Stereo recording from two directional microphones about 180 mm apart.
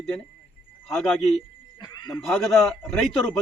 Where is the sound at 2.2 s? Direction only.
Centre (ahead or behind).